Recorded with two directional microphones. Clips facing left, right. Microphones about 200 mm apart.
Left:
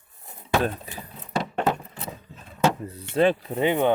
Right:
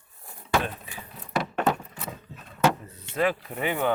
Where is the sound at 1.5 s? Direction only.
25° left (ahead or behind).